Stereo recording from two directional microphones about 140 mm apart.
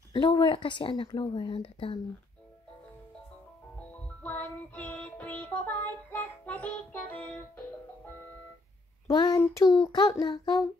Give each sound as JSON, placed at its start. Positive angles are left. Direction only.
{"t": 0.1, "sound": "a woman's voice", "side_deg": 35}
{"t": 4.2, "sound": "music", "side_deg": 10}
{"t": 9.0, "sound": "a child's voice", "side_deg": 30}
{"t": 9.4, "sound": "child singing", "side_deg": 25}